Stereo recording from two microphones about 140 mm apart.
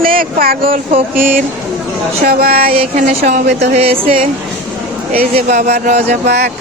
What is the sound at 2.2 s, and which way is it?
Speech, 90° right.